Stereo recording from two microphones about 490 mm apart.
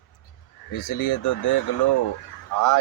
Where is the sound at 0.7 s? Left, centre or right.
Left.